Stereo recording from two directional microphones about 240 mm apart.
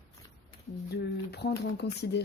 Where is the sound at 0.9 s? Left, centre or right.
Left.